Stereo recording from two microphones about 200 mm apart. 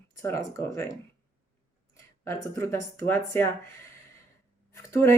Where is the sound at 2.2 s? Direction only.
15° left (ahead or behind).